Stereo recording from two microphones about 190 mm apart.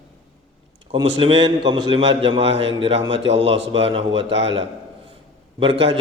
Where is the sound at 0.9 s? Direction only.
25° right (ahead or behind).